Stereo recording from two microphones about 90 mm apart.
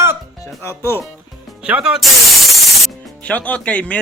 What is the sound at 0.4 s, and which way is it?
Speech, 30° left (ahead or behind).